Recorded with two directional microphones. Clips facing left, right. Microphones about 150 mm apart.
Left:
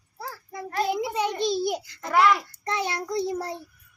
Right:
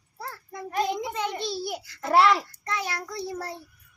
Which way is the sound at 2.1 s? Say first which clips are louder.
Right 1 dB; 30° right (ahead or behind).